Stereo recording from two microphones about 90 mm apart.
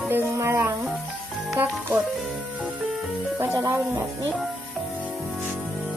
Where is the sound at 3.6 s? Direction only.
35° right (ahead or behind).